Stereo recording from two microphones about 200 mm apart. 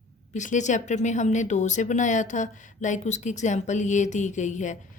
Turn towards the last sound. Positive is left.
turn(degrees=40)  # may be behind; listen again after turning